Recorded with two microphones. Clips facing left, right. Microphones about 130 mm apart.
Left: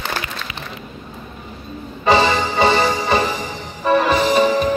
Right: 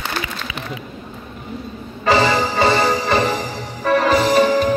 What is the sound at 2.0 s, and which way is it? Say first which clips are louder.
Music: even; 25° left (ahead or behind).